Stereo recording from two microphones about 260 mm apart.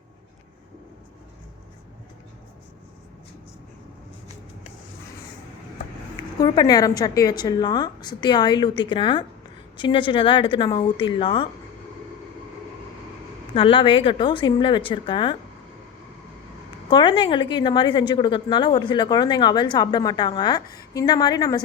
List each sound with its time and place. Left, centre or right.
6.4 s a woman's voice: centre
13.5 s a woman's voice: centre
16.9 s a woman's voice: centre